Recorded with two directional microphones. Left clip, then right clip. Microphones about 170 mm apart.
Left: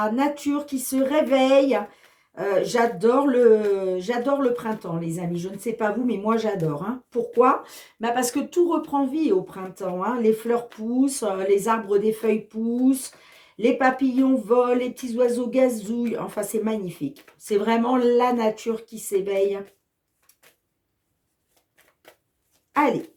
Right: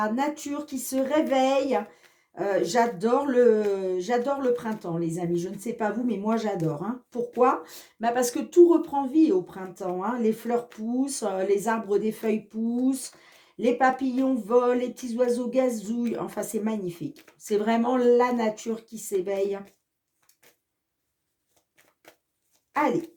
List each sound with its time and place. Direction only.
0.0 s speech: 35° right (ahead or behind)
13.6 s speech: 30° right (ahead or behind)